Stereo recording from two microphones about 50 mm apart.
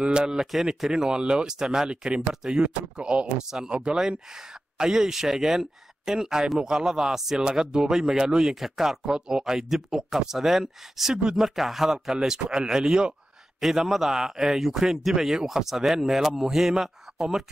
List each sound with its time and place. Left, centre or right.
0.0 s speech: centre
0.5 s a man's voice: centre